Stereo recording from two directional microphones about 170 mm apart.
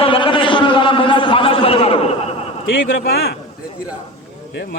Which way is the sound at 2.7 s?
70° left (ahead or behind).